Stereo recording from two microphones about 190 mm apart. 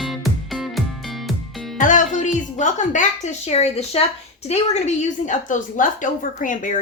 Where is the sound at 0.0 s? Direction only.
Centre (ahead or behind).